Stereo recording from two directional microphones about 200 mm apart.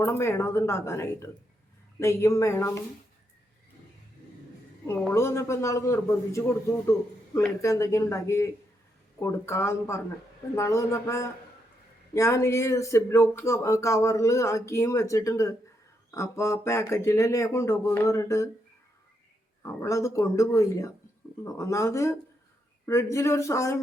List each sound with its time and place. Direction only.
0.0 s speech: 10° left (ahead or behind)
4.9 s speech: 15° left (ahead or behind)
19.6 s speech: 15° left (ahead or behind)